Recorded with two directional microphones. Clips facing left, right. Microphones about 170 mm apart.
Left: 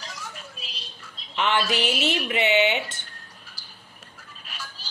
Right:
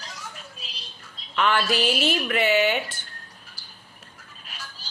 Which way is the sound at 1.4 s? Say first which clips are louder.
Right 1 dB; 20° left (ahead or behind).